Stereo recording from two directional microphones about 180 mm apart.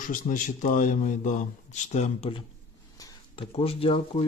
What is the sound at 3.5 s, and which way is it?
Speech, 30° left (ahead or behind).